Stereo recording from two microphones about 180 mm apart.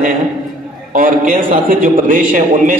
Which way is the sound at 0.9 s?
50° right (ahead or behind).